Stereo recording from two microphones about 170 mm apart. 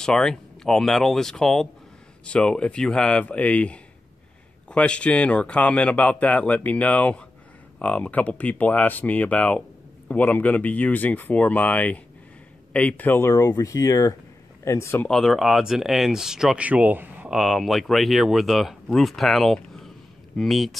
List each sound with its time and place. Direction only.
0.0 s speech: 5° left (ahead or behind)
15.0 s speech: 5° left (ahead or behind)